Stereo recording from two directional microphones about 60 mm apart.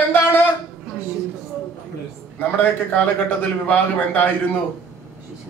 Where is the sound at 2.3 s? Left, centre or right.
Left.